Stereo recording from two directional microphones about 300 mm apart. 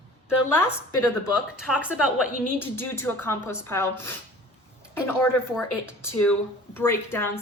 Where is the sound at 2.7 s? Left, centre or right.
Centre.